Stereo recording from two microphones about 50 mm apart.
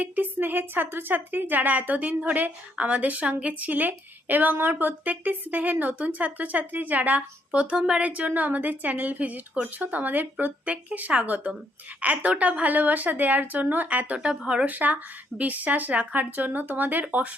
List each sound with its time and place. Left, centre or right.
0.0 s a woman's voice: right
8.3 s a woman's voice: right; by 14.7 s centre
14.7 s a woman's voice: right